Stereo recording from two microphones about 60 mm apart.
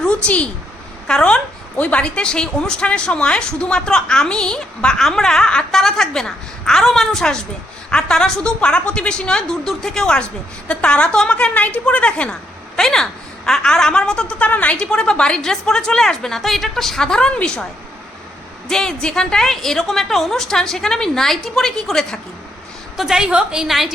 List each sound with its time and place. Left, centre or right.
0.0 s a woman's voice: centre
12.7 s a sound: centre
13.6 s a woman's voice: centre
18.7 s a woman's voice: centre
23.0 s a woman's voice: centre
23.6 s a woman's voice: centre